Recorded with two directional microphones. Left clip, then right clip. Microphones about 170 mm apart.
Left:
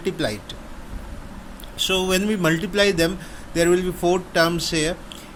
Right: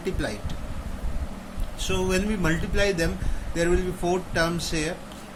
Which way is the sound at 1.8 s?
50° left (ahead or behind).